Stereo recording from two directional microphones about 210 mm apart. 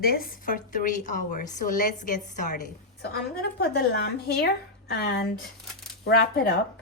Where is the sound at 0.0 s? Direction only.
45° left (ahead or behind).